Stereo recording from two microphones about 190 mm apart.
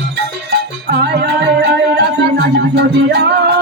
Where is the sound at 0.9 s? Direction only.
60° right (ahead or behind).